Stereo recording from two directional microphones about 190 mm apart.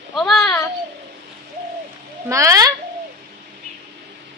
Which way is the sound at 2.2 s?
15° right (ahead or behind).